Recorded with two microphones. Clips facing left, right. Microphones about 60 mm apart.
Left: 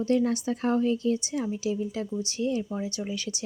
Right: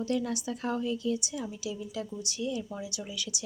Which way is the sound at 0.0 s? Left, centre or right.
Left.